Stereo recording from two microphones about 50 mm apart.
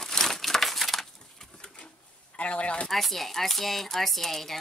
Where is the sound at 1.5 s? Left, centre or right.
Centre.